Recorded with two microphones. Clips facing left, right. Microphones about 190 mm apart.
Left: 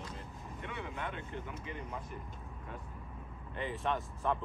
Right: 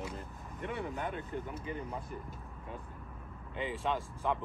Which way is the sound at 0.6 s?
40° right (ahead or behind).